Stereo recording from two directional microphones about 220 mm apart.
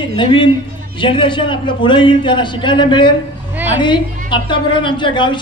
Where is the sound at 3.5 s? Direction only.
10° right (ahead or behind).